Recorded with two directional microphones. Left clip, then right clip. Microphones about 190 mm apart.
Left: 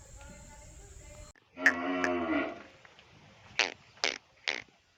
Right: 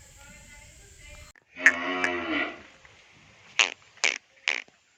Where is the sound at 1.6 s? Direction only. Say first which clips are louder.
Right 6 dB; 20° left (ahead or behind).